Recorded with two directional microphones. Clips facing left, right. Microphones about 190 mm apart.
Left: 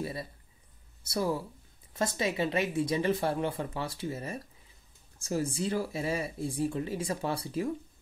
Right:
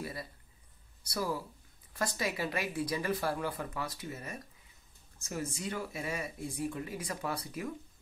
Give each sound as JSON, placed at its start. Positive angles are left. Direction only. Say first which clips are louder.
{"t": 0.0, "sound": "speech", "louder": "left 5 dB", "side_deg": 25}